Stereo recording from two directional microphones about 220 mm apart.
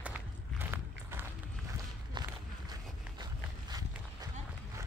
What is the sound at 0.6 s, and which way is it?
Walk, 10° right (ahead or behind).